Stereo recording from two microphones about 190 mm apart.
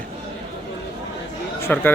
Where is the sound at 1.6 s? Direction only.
10° left (ahead or behind).